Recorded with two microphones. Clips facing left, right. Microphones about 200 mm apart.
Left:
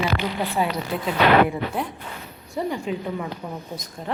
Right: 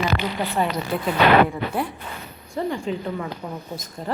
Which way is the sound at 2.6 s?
15° left (ahead or behind).